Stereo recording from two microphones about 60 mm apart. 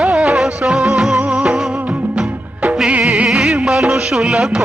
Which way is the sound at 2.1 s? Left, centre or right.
Right.